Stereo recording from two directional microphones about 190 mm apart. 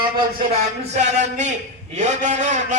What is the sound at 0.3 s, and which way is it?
A man's voice, 35° right (ahead or behind).